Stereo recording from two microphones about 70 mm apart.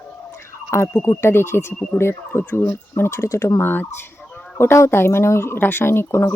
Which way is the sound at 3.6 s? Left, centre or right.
Left.